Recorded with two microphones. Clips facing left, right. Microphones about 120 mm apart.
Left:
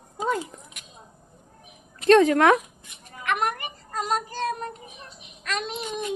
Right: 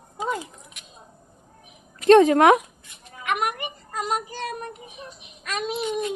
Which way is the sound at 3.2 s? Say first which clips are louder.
Even; 10° right (ahead or behind).